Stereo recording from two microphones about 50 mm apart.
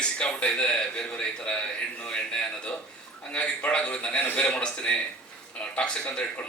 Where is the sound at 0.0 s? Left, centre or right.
Left.